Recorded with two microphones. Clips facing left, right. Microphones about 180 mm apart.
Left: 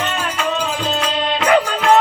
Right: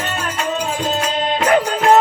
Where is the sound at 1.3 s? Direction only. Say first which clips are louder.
Even; 40° right (ahead or behind).